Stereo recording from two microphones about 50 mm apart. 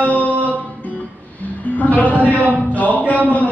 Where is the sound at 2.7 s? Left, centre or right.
Left.